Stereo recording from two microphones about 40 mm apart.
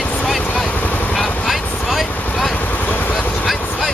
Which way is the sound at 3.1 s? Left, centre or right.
Centre.